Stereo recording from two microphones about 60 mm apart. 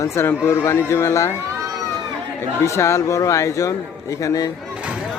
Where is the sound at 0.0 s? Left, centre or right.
Left.